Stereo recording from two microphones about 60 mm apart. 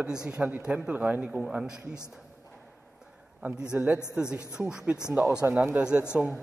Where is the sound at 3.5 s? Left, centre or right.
Centre.